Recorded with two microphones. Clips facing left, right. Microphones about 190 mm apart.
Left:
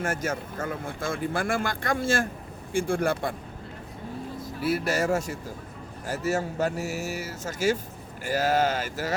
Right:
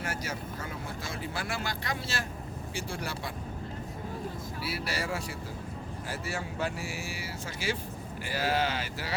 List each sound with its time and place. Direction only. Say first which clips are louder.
0.0 s speech: left 7 dB; 50° left (ahead or behind)
4.6 s speech: left 10 dB; 50° left (ahead or behind)